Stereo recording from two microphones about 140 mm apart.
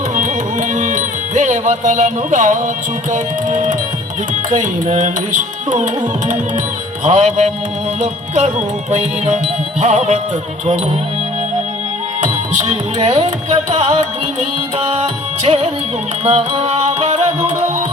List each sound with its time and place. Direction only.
0.7 s music: 65° right (ahead or behind)
12.2 s music: 55° right (ahead or behind)